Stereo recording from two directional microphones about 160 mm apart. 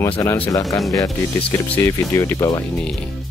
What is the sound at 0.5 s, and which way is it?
Speech, 20° left (ahead or behind).